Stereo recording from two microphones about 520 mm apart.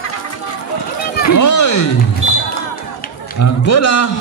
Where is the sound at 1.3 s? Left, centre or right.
Left.